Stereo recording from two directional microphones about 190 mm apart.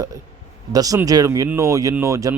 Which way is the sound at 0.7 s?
20° right (ahead or behind).